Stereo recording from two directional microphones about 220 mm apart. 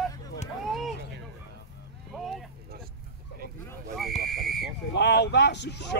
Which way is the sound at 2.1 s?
Centre (ahead or behind).